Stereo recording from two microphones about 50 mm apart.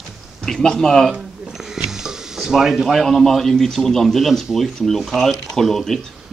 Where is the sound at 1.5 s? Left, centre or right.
Centre.